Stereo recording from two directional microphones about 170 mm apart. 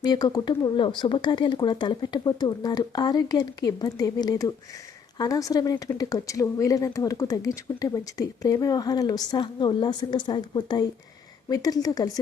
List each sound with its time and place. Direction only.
0.0 s speech: 20° left (ahead or behind)